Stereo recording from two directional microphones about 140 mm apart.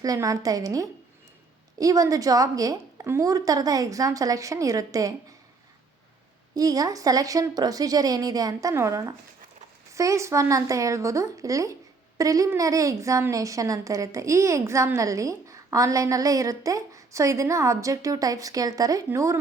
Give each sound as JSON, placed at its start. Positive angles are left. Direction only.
{"t": 0.0, "sound": "speech", "side_deg": -25}
{"t": 6.5, "sound": "speech", "side_deg": -25}